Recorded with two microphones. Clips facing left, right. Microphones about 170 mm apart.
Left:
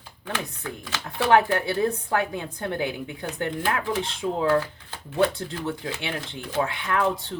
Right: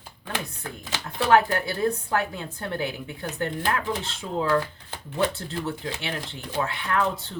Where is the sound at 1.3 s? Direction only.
20° left (ahead or behind).